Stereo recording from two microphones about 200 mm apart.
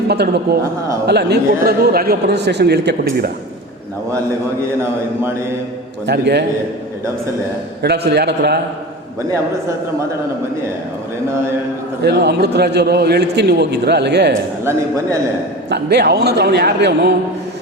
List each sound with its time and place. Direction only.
0.1 s a man's voice: 55° right (ahead or behind)
4.8 s mantra: 10° right (ahead or behind)
6.1 s a man's voice: 55° right (ahead or behind)
7.8 s a man's voice: 55° right (ahead or behind)
12.0 s a man's voice: 55° right (ahead or behind)
14.6 s mantra: 15° right (ahead or behind)
15.7 s a man's voice: 55° right (ahead or behind)